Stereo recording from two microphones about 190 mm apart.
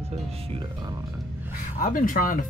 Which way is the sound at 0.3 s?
30° right (ahead or behind).